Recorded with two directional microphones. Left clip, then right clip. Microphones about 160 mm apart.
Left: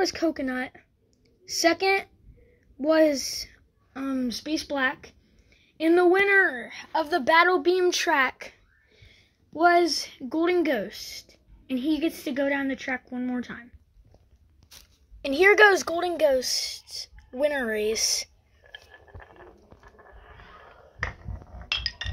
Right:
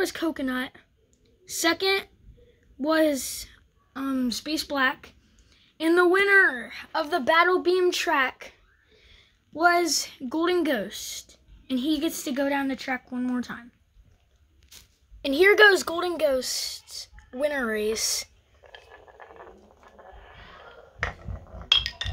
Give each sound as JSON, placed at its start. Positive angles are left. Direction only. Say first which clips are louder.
{"t": 0.0, "sound": "a woman's voice", "louder": "left 2 dB", "side_deg": 10}
{"t": 15.2, "sound": "speech", "louder": "even", "side_deg": 5}
{"t": 18.9, "sound": "a sound", "louder": "right 2 dB", "side_deg": -10}
{"t": 21.6, "sound": "chink", "louder": "right 7 dB", "side_deg": -15}